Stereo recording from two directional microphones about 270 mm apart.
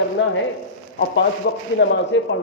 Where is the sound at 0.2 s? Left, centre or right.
Left.